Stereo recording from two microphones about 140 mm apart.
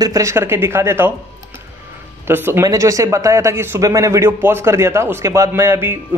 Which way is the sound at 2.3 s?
15° right (ahead or behind).